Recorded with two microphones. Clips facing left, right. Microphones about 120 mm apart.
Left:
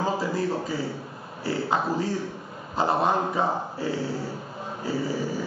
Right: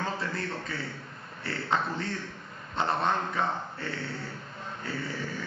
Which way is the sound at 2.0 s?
5° left (ahead or behind).